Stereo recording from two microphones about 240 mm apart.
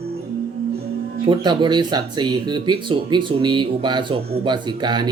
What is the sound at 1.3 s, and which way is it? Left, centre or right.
Speech, centre.